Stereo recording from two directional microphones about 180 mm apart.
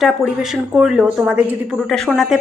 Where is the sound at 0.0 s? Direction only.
Centre (ahead or behind).